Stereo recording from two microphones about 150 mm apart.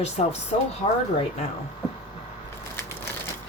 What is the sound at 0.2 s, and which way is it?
Speech, 50° left (ahead or behind).